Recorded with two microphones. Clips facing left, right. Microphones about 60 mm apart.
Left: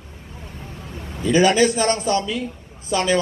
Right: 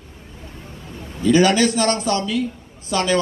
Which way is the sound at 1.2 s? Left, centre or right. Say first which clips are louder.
Right 1 dB; left.